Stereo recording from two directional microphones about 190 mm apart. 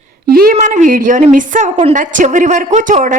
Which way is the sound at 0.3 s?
50° right (ahead or behind).